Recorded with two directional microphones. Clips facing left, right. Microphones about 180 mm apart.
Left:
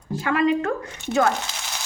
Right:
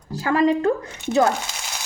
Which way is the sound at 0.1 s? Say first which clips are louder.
Right 2 dB; 35° right (ahead or behind).